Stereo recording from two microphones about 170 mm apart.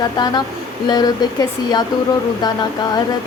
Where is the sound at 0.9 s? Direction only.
25° left (ahead or behind).